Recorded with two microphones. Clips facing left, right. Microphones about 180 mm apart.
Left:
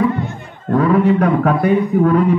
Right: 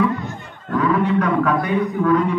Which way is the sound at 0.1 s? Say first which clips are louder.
Left 4 dB; 30° left (ahead or behind).